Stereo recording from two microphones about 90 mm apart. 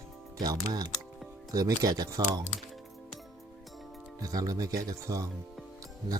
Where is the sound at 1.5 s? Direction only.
45° right (ahead or behind).